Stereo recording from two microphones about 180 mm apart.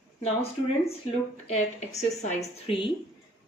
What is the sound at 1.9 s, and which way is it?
Speech, 15° left (ahead or behind).